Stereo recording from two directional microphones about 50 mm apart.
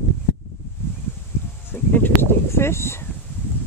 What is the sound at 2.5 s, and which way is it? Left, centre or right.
Speech, left.